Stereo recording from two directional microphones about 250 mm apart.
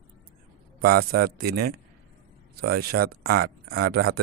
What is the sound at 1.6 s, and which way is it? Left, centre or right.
Speech, right.